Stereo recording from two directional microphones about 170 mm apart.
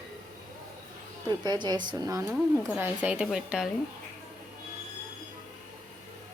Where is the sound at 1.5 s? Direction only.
25° right (ahead or behind).